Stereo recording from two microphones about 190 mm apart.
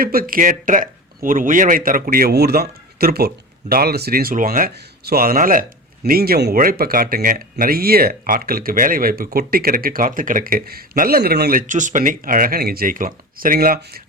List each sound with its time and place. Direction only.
0.0 s speech: 50° right (ahead or behind)